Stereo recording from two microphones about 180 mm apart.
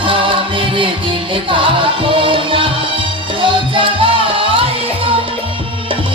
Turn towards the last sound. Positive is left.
turn(degrees=-30)  # may be behind; listen again after turning